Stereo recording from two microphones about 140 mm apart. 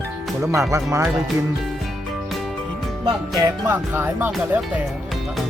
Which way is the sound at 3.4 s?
20° right (ahead or behind).